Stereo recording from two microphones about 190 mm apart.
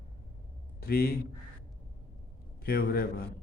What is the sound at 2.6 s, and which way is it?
Speech, 50° left (ahead or behind).